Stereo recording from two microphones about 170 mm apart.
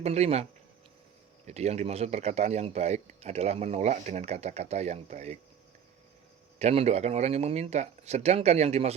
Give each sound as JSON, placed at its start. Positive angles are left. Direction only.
{"t": 0.0, "sound": "a man's voice", "side_deg": -40}
{"t": 1.5, "sound": "a man's voice", "side_deg": -40}
{"t": 6.6, "sound": "a man's voice", "side_deg": -40}